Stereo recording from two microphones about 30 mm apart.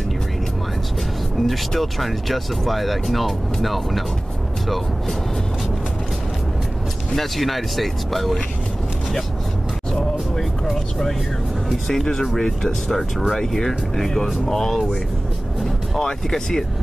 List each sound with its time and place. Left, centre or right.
1.4 s speech: centre
7.2 s speech: centre
10.3 s vehicle: centre
11.9 s speech: centre
16.0 s speech: centre